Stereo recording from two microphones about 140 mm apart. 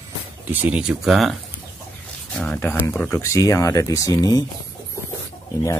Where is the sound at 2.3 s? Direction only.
10° left (ahead or behind); by 4.5 s 25° left (ahead or behind).